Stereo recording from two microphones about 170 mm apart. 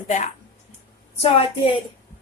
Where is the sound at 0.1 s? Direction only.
45° left (ahead or behind).